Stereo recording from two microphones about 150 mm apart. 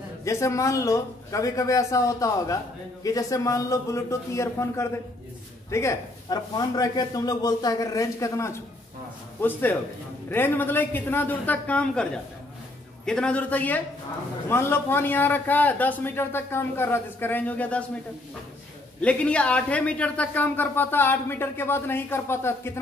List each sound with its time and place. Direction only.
0.2 s a man's voice: 20° left (ahead or behind)
18.9 s speech: 10° left (ahead or behind)